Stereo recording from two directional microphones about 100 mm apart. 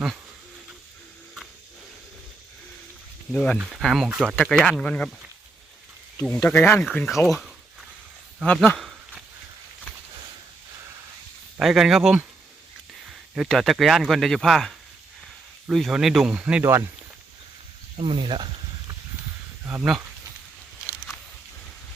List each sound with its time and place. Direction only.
3.3 s speech: 5° left (ahead or behind)
6.2 s speech: 10° left (ahead or behind)
6.9 s speech: centre (ahead or behind)
8.4 s speech: 15° left (ahead or behind)
8.8 s a sound: 5° right (ahead or behind)
11.6 s speech: 5° right (ahead or behind)
13.3 s speech: centre (ahead or behind)
17.9 s speech: 60° right (ahead or behind)